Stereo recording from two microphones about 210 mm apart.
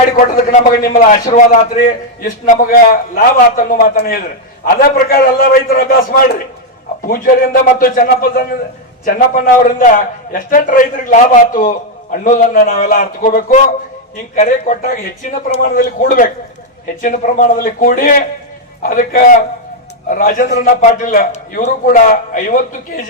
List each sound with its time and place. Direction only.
0.3 s a man's voice: 40° left (ahead or behind)